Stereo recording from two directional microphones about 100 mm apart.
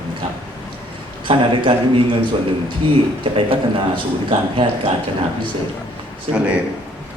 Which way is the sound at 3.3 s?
60° right (ahead or behind).